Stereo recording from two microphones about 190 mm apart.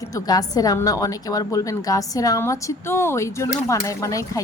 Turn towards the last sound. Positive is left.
turn(degrees=15)  # may be behind; listen again after turning